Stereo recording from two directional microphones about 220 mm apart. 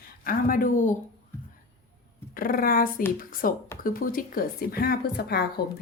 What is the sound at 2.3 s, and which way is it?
A woman's voice, 40° left (ahead or behind).